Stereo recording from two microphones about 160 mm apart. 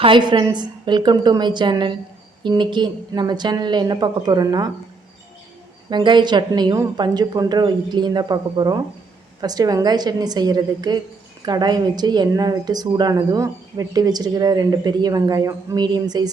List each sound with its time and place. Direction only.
0.0 s a woman's voice: 30° right (ahead or behind)
5.9 s a woman's voice: 30° right (ahead or behind)